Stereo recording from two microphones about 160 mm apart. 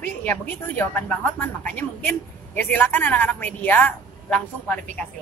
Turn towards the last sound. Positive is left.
turn(degrees=5)  # may be behind; listen again after turning